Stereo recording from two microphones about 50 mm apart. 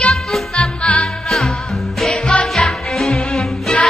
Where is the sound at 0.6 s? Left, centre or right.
Left.